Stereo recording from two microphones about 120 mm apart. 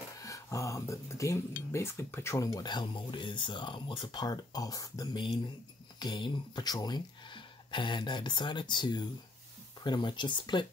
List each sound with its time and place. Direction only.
0.2 s speech: 25° left (ahead or behind)